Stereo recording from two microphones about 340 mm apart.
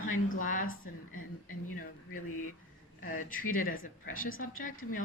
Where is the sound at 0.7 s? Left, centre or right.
Left.